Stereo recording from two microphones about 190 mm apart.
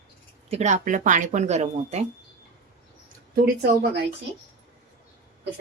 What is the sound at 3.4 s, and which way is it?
Speech, 55° right (ahead or behind).